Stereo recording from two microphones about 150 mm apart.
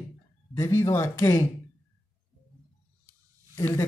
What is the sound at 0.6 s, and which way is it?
Speech, 20° left (ahead or behind).